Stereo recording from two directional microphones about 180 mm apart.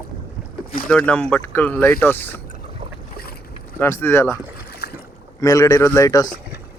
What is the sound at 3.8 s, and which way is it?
Speech, 15° left (ahead or behind).